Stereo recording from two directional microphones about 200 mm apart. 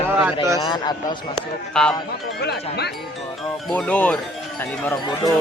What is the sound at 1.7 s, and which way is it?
Speech, 5° left (ahead or behind).